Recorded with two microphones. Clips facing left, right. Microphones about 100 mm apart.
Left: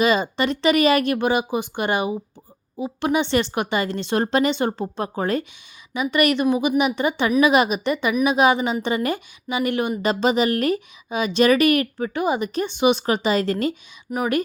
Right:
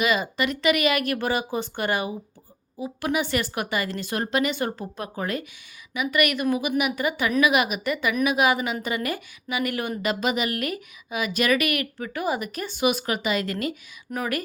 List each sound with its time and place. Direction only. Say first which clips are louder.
0.0 s speech: left 4 dB; 30° left (ahead or behind)
14.1 s speech: left 6 dB; 20° left (ahead or behind)